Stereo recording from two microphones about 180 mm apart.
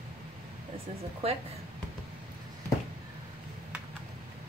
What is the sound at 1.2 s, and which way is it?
Speech, 35° right (ahead or behind).